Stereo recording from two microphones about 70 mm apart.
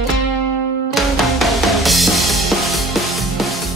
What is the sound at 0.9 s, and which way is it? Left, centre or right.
Music, centre.